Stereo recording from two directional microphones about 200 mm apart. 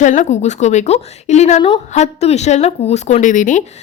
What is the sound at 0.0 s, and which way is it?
A woman's voice, 40° left (ahead or behind).